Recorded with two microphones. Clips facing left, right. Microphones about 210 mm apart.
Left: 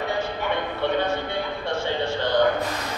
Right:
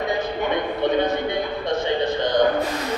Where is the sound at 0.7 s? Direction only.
15° right (ahead or behind).